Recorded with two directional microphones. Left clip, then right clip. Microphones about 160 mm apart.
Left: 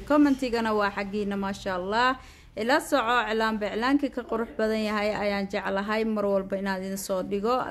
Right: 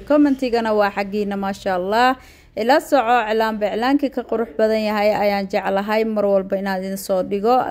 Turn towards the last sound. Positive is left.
turn(degrees=-30)  # may be behind; listen again after turning